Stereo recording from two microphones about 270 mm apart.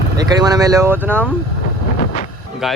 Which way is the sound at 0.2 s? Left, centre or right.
Centre.